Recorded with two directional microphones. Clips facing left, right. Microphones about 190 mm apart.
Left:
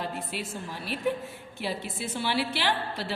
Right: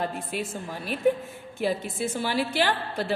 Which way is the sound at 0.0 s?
50° right (ahead or behind).